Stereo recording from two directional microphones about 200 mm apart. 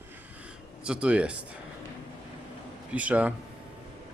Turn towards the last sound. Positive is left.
turn(degrees=-5)  # may be behind; listen again after turning